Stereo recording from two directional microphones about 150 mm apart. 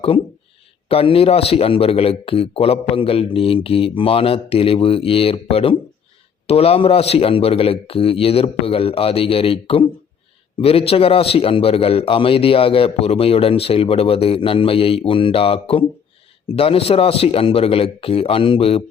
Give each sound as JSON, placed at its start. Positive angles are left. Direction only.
{"t": 0.9, "sound": "a man's voice", "side_deg": 40}